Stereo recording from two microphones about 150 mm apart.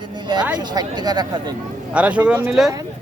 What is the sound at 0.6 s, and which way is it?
Speech, 30° right (ahead or behind).